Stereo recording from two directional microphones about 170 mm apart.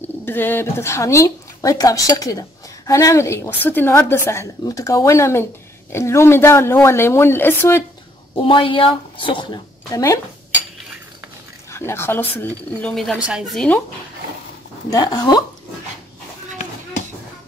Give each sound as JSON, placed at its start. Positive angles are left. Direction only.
{"t": 0.2, "sound": "speech", "side_deg": 10}
{"t": 8.4, "sound": "speech", "side_deg": 30}
{"t": 11.7, "sound": "speech", "side_deg": 15}
{"t": 14.9, "sound": "speech", "side_deg": 20}